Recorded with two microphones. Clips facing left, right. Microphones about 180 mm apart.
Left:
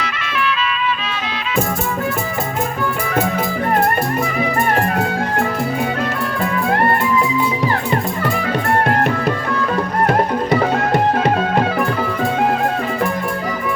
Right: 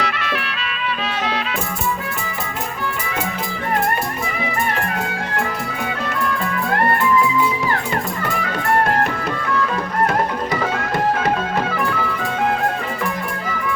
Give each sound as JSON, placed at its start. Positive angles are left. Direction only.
{"t": 0.0, "sound": "music", "side_deg": -60}
{"t": 10.1, "sound": "music", "side_deg": 35}